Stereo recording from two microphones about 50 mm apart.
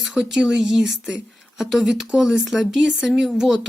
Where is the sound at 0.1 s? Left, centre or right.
Centre.